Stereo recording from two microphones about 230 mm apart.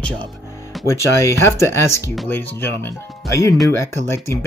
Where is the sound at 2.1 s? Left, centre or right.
Centre.